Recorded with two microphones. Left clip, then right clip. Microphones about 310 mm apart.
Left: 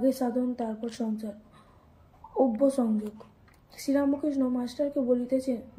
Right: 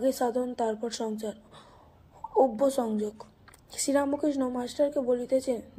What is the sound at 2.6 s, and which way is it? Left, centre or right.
Speech, right.